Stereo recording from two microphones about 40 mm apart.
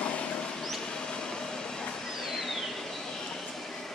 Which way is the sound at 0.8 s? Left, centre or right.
Centre.